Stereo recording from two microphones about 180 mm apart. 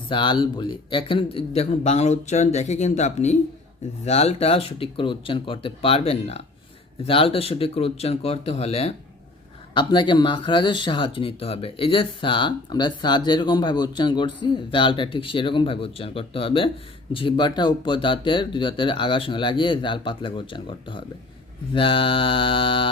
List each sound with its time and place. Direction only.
0.1 s a man's voice: 25° left (ahead or behind)